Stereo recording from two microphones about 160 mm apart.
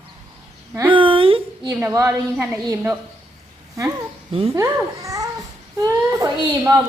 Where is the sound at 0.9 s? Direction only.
35° right (ahead or behind).